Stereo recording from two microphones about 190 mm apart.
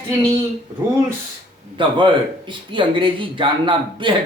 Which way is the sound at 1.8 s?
25° right (ahead or behind).